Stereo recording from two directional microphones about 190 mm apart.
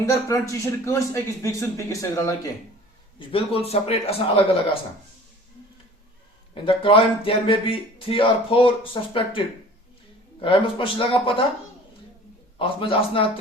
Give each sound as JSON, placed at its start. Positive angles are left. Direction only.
{"t": 0.0, "sound": "speech", "side_deg": 15}
{"t": 3.2, "sound": "a man's voice", "side_deg": 30}
{"t": 6.5, "sound": "speech", "side_deg": 25}
{"t": 10.4, "sound": "speech", "side_deg": 25}
{"t": 12.5, "sound": "speech", "side_deg": 30}